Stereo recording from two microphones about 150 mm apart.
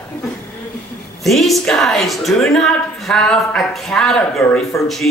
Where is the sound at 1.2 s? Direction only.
Centre (ahead or behind).